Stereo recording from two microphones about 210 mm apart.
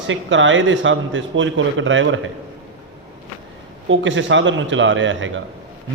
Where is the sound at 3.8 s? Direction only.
60° right (ahead or behind).